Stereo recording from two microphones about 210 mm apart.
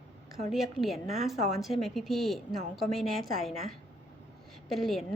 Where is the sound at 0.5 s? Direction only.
Centre (ahead or behind).